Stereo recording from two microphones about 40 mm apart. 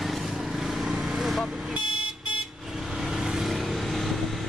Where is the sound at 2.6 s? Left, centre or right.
Centre.